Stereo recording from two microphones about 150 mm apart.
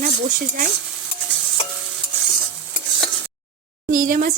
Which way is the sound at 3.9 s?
65° right (ahead or behind).